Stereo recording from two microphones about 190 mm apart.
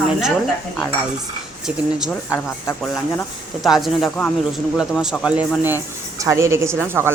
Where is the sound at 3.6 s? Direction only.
Centre (ahead or behind).